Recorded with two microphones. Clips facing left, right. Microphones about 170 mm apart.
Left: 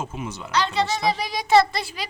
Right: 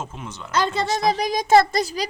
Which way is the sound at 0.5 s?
50° right (ahead or behind).